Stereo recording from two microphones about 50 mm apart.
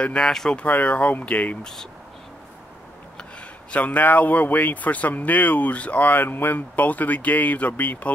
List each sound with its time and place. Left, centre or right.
0.2 s speech: centre
0.7 s speech: left
1.6 s speech: centre
3.2 s speech: left